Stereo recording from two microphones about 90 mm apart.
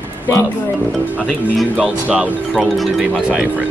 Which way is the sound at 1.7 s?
10° right (ahead or behind).